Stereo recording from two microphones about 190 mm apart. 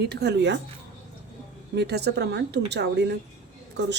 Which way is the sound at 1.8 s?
60° right (ahead or behind).